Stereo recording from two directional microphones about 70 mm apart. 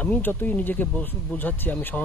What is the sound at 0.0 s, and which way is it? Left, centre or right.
Speech, left.